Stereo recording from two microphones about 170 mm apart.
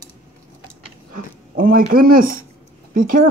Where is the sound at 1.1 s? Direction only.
55° right (ahead or behind).